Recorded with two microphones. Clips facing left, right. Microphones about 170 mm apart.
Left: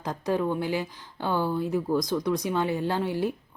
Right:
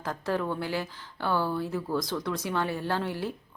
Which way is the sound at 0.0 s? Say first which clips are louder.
Left 3 dB; 15° left (ahead or behind).